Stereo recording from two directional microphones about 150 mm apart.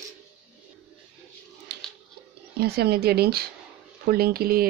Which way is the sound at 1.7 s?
90° right.